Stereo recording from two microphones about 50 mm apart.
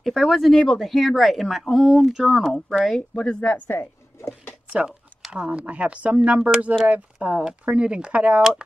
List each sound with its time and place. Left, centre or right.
0.0 s speech: centre
3.2 s a woman's voice: centre
5.3 s speech: right
8.4 s speech: centre